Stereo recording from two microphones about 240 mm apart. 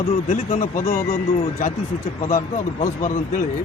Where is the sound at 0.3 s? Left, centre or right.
Left.